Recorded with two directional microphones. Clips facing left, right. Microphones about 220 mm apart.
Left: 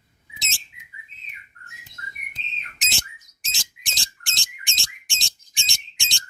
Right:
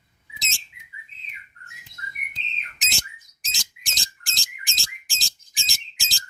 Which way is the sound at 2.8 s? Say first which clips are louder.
Left 1 dB; centre (ahead or behind).